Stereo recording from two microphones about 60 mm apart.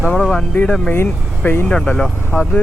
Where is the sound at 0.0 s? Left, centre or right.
Centre.